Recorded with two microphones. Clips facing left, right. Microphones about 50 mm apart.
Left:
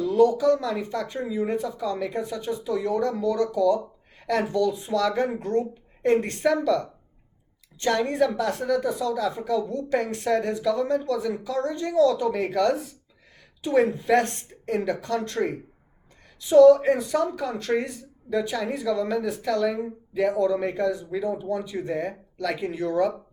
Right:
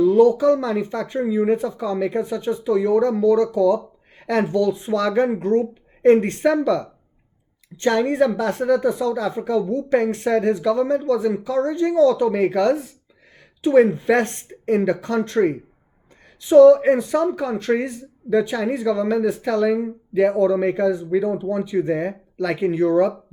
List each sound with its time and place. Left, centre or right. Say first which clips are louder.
0.0 s speech: right 5 dB; right
7.8 s speech: right 5 dB; right